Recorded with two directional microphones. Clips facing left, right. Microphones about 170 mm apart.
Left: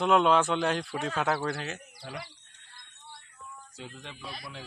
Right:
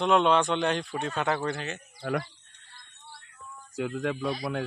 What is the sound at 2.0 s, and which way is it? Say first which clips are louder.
Speech: right 12 dB; 60° right (ahead or behind).